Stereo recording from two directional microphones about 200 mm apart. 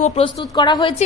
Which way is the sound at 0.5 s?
20° left (ahead or behind).